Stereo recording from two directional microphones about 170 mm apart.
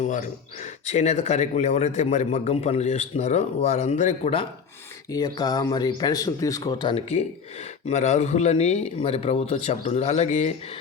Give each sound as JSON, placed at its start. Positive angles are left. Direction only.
{"t": 0.0, "sound": "speech", "side_deg": 45}
{"t": 5.1, "sound": "speech", "side_deg": 25}